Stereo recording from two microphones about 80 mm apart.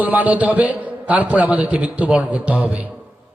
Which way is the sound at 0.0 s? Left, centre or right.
Right.